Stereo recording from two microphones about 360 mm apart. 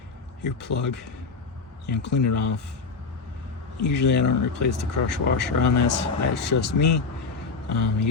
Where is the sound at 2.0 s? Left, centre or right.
Left.